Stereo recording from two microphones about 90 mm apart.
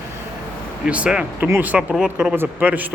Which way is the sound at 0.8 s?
10° right (ahead or behind).